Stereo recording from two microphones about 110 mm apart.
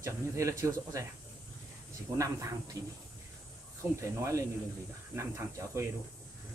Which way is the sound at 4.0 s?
25° right (ahead or behind).